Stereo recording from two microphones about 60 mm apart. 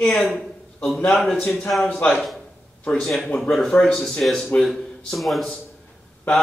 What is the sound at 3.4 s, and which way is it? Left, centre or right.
A man's voice, centre.